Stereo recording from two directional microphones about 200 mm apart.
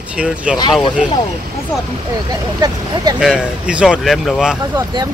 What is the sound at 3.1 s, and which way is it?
Speech, 5° right (ahead or behind).